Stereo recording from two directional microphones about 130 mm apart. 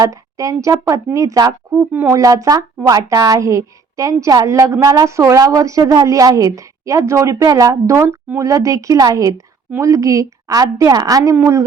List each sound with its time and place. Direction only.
0.0 s a woman's voice: 25° right (ahead or behind)
1.9 s speech: 15° right (ahead or behind)
2.2 s a woman's voice: 25° right (ahead or behind)